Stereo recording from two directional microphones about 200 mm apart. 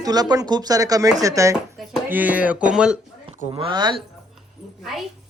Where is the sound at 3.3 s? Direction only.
30° right (ahead or behind).